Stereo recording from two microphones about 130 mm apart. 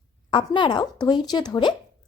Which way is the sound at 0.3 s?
40° left (ahead or behind).